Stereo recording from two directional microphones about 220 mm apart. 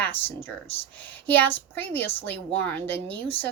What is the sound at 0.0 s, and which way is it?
Speech, 10° left (ahead or behind).